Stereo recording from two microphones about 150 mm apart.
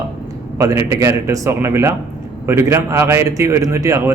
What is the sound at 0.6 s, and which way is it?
A man's voice, 20° right (ahead or behind).